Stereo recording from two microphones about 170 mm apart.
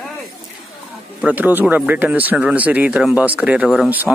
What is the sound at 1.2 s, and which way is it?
Speech, 10° right (ahead or behind).